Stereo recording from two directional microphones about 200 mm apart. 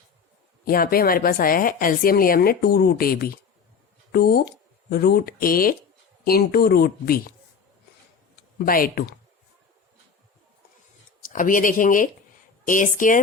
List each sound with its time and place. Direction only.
0.6 s a woman's voice: 45° left (ahead or behind)
8.5 s a woman's voice: 45° left (ahead or behind)
11.2 s speech: 40° left (ahead or behind)